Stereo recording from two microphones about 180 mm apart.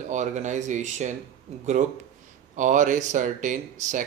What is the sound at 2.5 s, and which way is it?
Speech, 45° right (ahead or behind).